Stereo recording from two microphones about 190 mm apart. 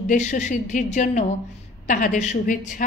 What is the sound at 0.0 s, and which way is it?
A woman's voice, 40° left (ahead or behind).